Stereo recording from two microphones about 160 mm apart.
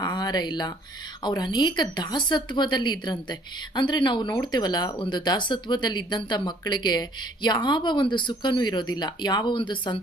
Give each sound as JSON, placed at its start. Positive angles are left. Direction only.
{"t": 0.0, "sound": "speech", "side_deg": 25}